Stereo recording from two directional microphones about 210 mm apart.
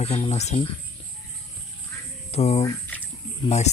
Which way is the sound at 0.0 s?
30° left (ahead or behind).